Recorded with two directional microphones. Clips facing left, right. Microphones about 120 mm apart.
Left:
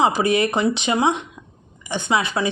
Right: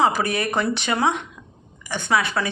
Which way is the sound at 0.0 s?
20° left (ahead or behind).